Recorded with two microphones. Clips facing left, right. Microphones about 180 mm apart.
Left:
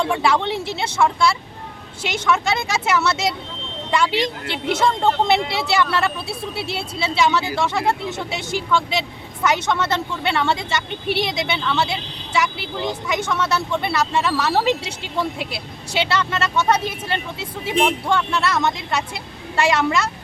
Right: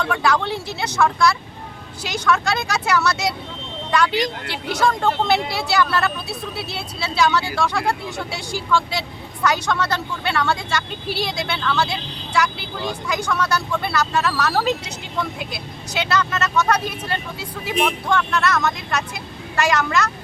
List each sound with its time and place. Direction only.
0.0 s speech: 25° left (ahead or behind)